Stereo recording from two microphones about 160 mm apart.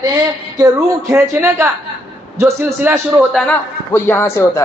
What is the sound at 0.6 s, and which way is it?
A man's voice, 20° right (ahead or behind).